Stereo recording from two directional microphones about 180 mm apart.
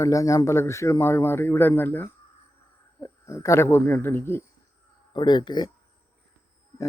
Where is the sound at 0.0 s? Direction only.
15° left (ahead or behind).